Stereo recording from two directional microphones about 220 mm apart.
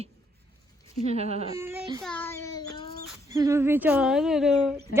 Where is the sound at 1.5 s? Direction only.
10° right (ahead or behind).